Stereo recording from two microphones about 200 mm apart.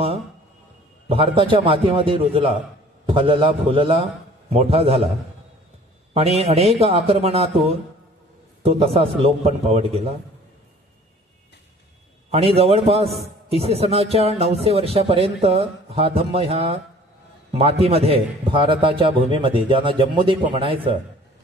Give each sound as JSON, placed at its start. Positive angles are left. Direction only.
{"t": 1.0, "sound": "a man's voice", "side_deg": -30}
{"t": 6.1, "sound": "a man's voice", "side_deg": -30}
{"t": 12.3, "sound": "a man's voice", "side_deg": -30}